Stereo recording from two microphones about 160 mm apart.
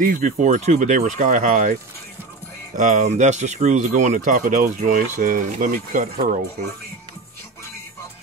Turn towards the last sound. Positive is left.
turn(degrees=-55)  # may be behind; listen again after turning